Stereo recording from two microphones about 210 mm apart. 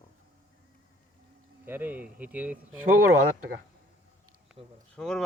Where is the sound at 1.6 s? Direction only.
10° right (ahead or behind).